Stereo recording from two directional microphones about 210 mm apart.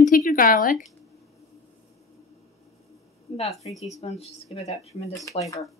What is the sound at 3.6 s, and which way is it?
Speech, 30° left (ahead or behind).